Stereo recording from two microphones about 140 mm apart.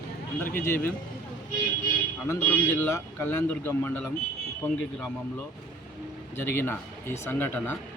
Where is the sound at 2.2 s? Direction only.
15° left (ahead or behind).